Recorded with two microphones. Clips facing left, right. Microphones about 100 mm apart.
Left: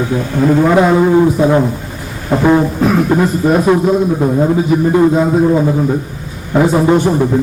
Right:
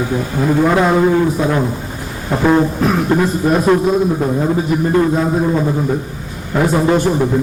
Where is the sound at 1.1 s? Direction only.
15° left (ahead or behind).